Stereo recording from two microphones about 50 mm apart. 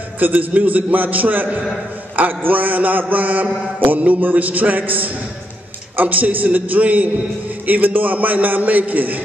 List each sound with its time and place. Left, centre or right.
0.2 s a man's voice: right